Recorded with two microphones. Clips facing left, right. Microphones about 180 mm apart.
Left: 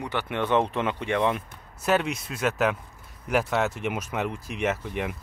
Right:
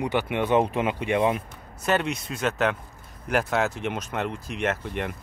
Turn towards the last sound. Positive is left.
turn(degrees=0)  # may be behind; listen again after turning